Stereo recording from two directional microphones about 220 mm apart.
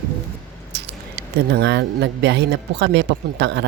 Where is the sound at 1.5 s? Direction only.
50° right (ahead or behind).